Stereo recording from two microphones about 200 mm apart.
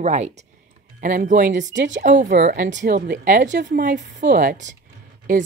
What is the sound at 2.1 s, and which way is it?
A woman's voice, 45° right (ahead or behind).